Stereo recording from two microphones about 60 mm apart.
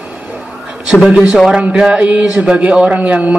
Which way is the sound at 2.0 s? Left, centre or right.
Right.